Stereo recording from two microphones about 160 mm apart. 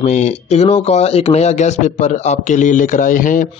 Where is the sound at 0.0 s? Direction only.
45° left (ahead or behind).